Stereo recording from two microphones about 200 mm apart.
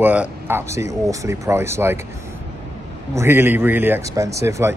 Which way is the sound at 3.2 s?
10° right (ahead or behind).